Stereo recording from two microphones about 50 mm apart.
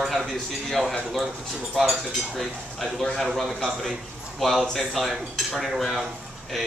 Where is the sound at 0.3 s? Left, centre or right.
Centre.